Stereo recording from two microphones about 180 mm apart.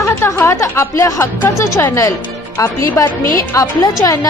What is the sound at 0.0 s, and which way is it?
A woman's voice, 15° left (ahead or behind).